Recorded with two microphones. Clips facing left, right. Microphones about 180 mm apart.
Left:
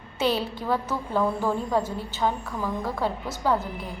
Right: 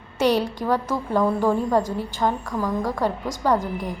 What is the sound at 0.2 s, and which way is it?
A woman's voice, 15° right (ahead or behind).